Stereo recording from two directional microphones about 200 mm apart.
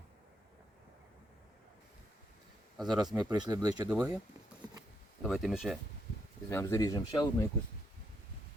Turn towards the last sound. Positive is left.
turn(degrees=20)  # may be behind; listen again after turning